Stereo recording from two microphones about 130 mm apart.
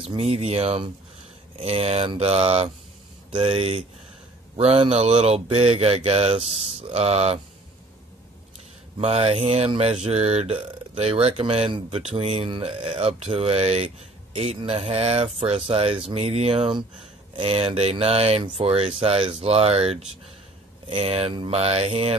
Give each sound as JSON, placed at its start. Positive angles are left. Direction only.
{"t": 0.0, "sound": "speech", "side_deg": -50}
{"t": 8.9, "sound": "speech", "side_deg": -55}